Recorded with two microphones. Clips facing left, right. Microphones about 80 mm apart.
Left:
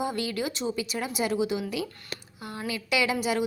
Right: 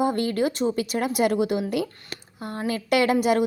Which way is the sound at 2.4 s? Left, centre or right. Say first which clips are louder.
Right 6 dB; right.